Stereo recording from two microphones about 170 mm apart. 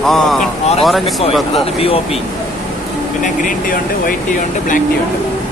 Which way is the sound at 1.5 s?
35° left (ahead or behind).